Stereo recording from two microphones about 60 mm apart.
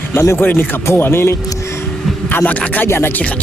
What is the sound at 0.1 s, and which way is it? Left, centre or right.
Speech, left.